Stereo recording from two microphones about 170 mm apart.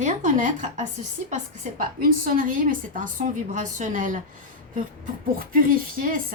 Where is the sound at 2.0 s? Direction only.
55° right (ahead or behind).